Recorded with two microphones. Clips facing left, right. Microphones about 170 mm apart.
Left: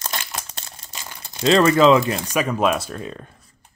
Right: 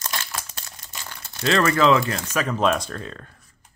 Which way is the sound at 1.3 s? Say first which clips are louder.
Left 5 dB; 20° left (ahead or behind).